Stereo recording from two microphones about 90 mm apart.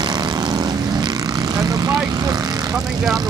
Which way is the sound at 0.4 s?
55° right (ahead or behind).